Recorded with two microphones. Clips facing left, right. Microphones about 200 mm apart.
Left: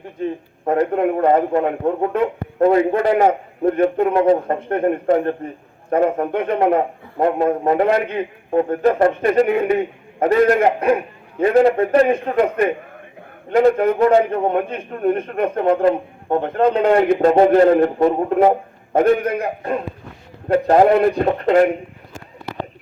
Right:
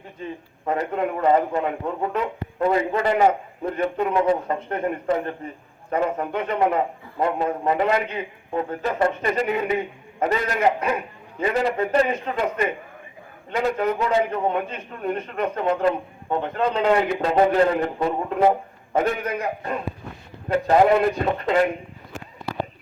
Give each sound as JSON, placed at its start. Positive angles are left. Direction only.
{"t": 0.7, "sound": "a man's voice", "side_deg": 55}